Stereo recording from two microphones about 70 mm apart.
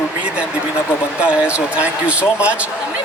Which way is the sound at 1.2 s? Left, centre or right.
Centre.